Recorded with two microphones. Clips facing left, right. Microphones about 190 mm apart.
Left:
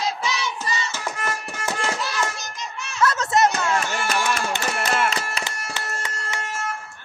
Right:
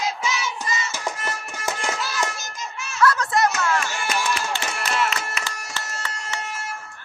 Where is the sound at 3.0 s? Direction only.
25° left (ahead or behind).